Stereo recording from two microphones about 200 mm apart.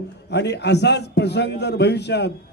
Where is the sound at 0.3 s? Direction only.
60° left (ahead or behind).